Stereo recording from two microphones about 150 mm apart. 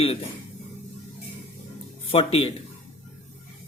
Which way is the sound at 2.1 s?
40° left (ahead or behind).